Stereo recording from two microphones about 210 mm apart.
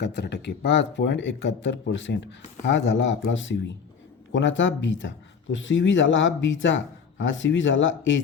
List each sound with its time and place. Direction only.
0.0 s speech: 55° left (ahead or behind)